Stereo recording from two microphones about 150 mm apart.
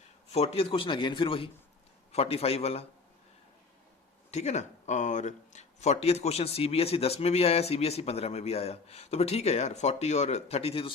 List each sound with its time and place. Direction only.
0.3 s a man's voice: 45° left (ahead or behind)
4.3 s speech: 50° left (ahead or behind)